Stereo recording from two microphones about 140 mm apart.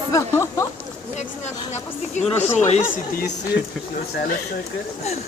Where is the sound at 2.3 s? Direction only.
15° left (ahead or behind).